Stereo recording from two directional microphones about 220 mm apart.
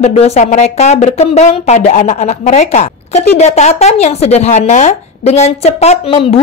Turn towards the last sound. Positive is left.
turn(degrees=25)  # may be behind; listen again after turning